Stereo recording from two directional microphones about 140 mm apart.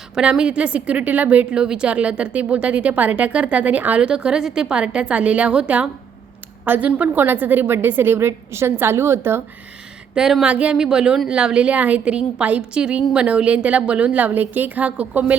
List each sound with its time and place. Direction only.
0.1 s a woman's voice: 5° right (ahead or behind)
10.2 s a woman's voice: 5° right (ahead or behind)